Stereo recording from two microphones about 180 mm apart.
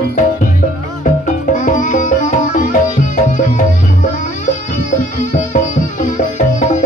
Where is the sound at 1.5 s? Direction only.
40° left (ahead or behind).